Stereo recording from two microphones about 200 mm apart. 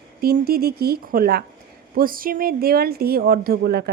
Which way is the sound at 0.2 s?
50° right (ahead or behind).